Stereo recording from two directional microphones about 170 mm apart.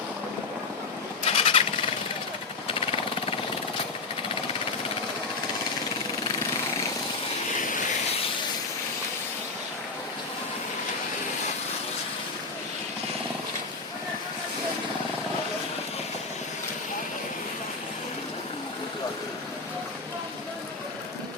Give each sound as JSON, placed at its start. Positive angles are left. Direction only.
{"t": 1.2, "sound": "vehicle", "side_deg": 35}
{"t": 2.6, "sound": "jackhammer", "side_deg": 35}